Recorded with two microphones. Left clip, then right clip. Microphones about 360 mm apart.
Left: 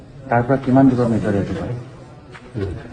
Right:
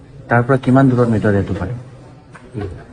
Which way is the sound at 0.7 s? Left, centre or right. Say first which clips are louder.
Right 1 dB; right.